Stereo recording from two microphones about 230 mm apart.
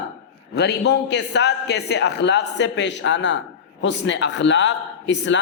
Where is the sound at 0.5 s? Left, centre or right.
Left.